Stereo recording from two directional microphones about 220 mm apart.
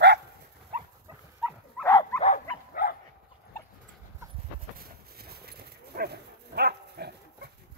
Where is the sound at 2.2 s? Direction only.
35° left (ahead or behind).